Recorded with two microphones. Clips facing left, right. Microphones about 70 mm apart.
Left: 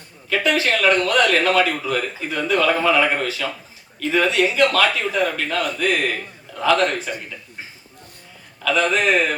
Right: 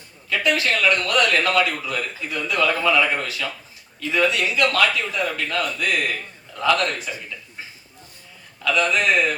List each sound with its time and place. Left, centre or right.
0.4 s a man's voice: left
8.6 s a man's voice: left